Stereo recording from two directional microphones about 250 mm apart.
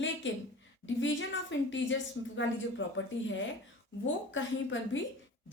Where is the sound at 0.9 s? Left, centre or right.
Left.